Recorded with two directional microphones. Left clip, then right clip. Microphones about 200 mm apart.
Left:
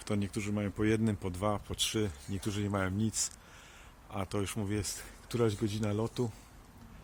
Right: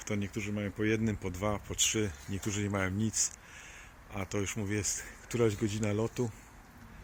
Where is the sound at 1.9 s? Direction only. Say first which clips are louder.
Right 1 dB; centre (ahead or behind).